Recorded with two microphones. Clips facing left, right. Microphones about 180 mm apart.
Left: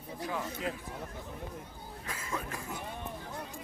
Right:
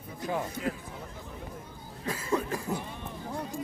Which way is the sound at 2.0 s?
35° right (ahead or behind).